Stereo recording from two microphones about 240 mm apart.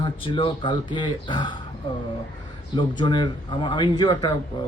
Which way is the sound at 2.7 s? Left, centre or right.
Centre.